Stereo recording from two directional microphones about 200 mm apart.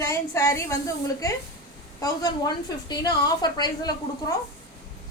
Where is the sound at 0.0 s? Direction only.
15° left (ahead or behind).